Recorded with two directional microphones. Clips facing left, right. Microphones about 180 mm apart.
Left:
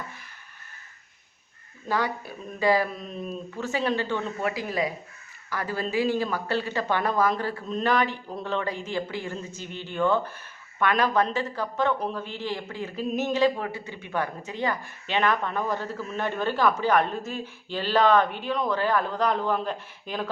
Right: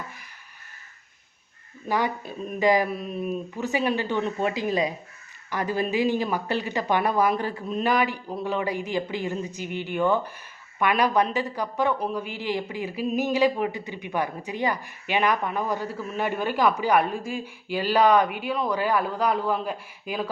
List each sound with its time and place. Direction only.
1.9 s a woman's voice: 20° right (ahead or behind)